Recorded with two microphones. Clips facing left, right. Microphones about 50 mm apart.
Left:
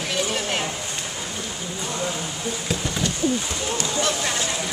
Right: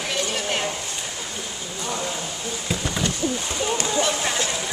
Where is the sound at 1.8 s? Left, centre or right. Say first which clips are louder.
Even; centre.